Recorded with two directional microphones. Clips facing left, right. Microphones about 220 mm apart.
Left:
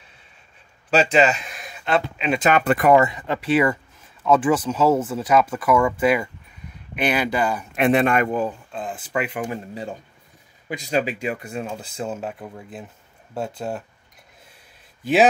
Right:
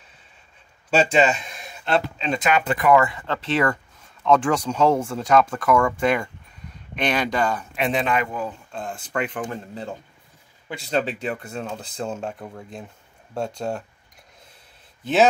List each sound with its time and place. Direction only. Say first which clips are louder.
0.8 s a sound: left 1 dB; centre (ahead or behind)
2.4 s speech: left 4 dB; 55° left (ahead or behind)
2.9 s speech: left 1 dB; 20° left (ahead or behind); by 7.6 s 5° left (ahead or behind)
7.7 s speech: left 8 dB; 55° left (ahead or behind)
8.7 s speech: right 1 dB; 5° left (ahead or behind)